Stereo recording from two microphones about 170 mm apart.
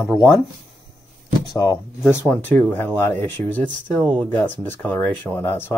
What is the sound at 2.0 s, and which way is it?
Speech, 15° left (ahead or behind).